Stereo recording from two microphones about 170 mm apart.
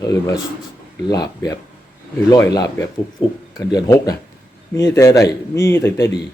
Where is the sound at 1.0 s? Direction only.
25° left (ahead or behind).